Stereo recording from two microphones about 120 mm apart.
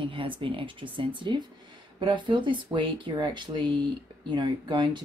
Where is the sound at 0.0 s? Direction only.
45° right (ahead or behind).